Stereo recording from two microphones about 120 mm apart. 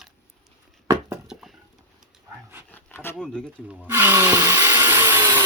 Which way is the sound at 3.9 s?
20° right (ahead or behind).